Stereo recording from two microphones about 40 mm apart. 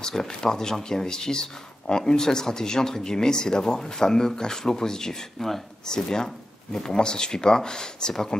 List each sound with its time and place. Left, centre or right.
0.0 s speech: centre